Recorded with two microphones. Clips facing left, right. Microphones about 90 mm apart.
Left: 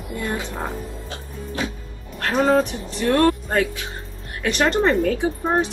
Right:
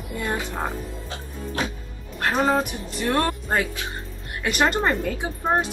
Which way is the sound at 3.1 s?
20° right (ahead or behind).